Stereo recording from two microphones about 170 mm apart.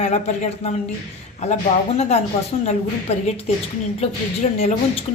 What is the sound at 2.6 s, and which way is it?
Speech, 40° left (ahead or behind).